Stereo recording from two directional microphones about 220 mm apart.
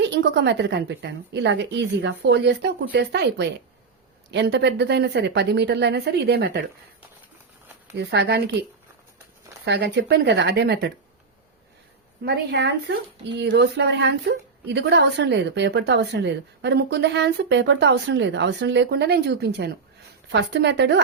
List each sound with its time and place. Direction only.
0.0 s a woman's voice: 55° right (ahead or behind)
7.9 s a woman's voice: 50° right (ahead or behind)
9.6 s a woman's voice: 50° right (ahead or behind)
12.2 s a woman's voice: 50° right (ahead or behind)